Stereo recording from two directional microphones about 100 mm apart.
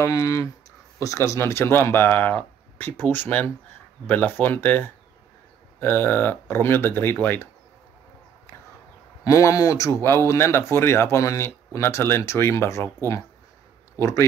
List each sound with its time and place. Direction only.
0.0 s speech: 35° left (ahead or behind)
9.2 s speech: 35° left (ahead or behind)